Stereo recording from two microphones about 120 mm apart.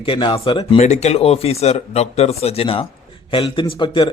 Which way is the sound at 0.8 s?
65° left (ahead or behind).